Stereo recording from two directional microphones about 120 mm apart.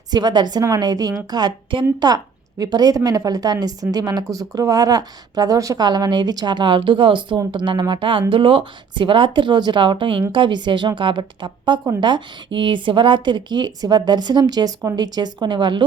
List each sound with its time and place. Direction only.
0.1 s a woman's voice: 35° right (ahead or behind)